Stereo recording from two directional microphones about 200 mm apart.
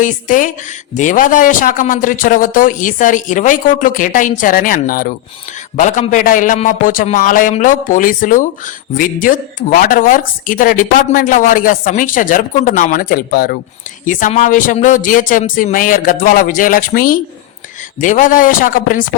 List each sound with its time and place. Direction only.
0.0 s a man's voice: 40° left (ahead or behind)